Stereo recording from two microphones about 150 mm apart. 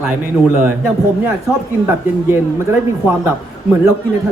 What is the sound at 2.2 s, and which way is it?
Speech, 15° right (ahead or behind).